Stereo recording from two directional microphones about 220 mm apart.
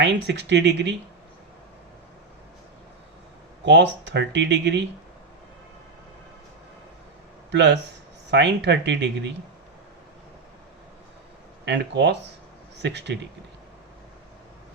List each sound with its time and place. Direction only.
0.0 s speech: 50° right (ahead or behind)
3.7 s speech: 50° right (ahead or behind)
7.5 s speech: 50° right (ahead or behind)
11.6 s speech: 50° right (ahead or behind)